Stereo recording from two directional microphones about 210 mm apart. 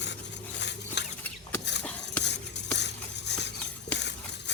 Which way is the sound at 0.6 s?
55° left (ahead or behind).